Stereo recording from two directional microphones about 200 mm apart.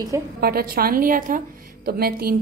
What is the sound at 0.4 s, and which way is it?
A woman's voice, 50° right (ahead or behind).